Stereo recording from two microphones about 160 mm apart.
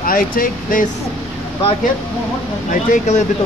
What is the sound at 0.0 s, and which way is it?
Speech, 60° left (ahead or behind).